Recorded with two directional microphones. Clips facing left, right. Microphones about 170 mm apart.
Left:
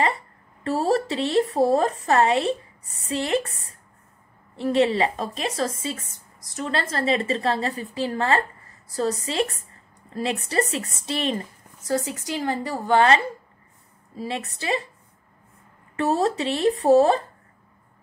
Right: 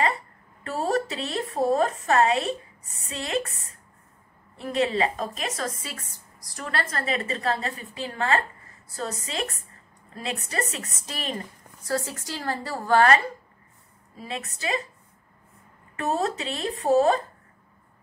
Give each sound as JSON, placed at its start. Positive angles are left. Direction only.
{"t": 0.7, "sound": "a woman's voice", "side_deg": 35}
{"t": 11.8, "sound": "a woman's voice", "side_deg": 20}
{"t": 14.1, "sound": "a woman's voice", "side_deg": 30}
{"t": 16.0, "sound": "a woman's voice", "side_deg": 35}